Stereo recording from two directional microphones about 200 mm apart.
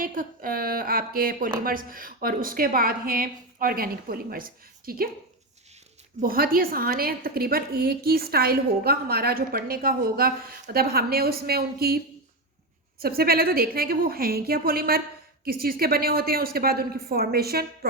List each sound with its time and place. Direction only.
0.0 s a woman's voice: 45° right (ahead or behind)
6.1 s a woman's voice: 45° right (ahead or behind)
13.0 s a woman's voice: 50° right (ahead or behind)